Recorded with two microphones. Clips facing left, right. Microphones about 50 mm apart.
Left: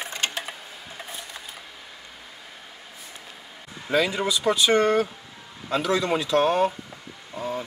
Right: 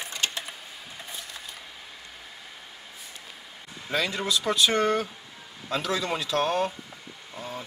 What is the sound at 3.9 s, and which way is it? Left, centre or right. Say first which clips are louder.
Speech: left 4 dB; centre.